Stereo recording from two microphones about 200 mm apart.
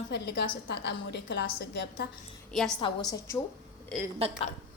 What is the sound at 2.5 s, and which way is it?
Speech, centre (ahead or behind).